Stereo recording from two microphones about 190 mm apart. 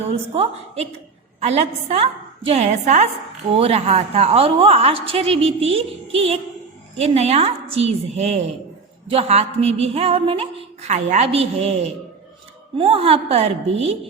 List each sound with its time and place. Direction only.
1.4 s a woman's voice: 35° right (ahead or behind)
12.7 s a woman's voice: 30° right (ahead or behind)